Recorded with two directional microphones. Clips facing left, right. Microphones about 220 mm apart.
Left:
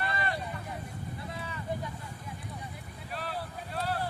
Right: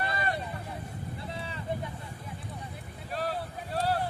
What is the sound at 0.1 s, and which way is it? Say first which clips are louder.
Vehicle: right 2 dB; 40° right (ahead or behind).